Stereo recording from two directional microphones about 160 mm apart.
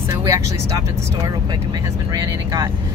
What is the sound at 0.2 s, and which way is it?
Speech, 20° right (ahead or behind).